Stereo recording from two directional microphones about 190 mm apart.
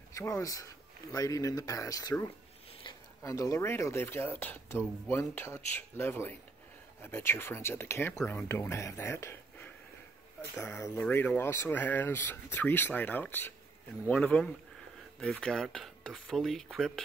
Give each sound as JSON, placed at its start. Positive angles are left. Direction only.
{"t": 0.1, "sound": "speech", "side_deg": 15}
{"t": 10.6, "sound": "speech", "side_deg": 15}